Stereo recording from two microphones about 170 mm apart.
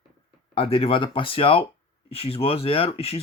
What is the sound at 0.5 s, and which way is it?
Speech, 35° left (ahead or behind).